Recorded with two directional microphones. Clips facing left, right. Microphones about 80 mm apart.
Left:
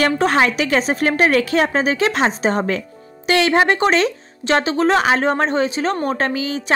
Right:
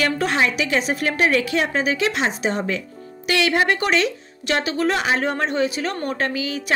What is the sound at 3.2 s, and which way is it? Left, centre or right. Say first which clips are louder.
A woman's voice: left 4 dB; left.